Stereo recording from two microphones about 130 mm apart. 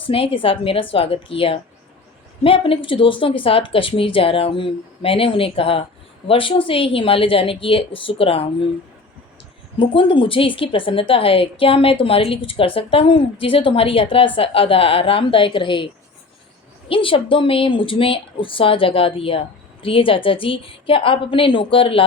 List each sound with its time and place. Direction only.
0.0 s speech: 45° left (ahead or behind)
9.7 s speech: 40° left (ahead or behind)
16.9 s speech: 40° left (ahead or behind)